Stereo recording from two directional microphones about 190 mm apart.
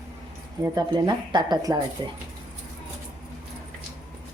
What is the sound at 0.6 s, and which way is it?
Speech, 20° right (ahead or behind).